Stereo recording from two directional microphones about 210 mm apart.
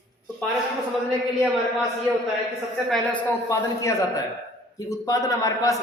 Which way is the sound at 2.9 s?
5° left (ahead or behind).